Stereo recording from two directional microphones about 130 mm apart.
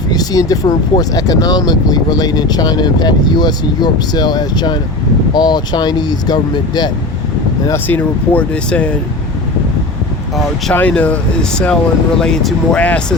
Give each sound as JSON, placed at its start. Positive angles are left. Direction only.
{"t": 0.1, "sound": "speech", "side_deg": 30}
{"t": 7.7, "sound": "speech", "side_deg": 15}
{"t": 10.8, "sound": "speech", "side_deg": 10}